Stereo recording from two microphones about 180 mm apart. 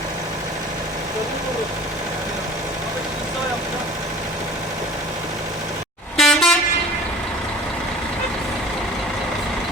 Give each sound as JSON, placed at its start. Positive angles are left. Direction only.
{"t": 6.1, "sound": "vehicle", "side_deg": 0}